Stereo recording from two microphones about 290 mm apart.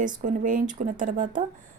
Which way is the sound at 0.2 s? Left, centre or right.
Right.